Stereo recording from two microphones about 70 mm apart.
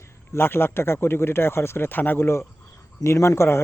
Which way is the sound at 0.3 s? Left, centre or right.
Left.